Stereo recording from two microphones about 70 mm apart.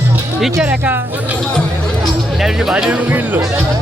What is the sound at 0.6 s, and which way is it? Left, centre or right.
Speech, right.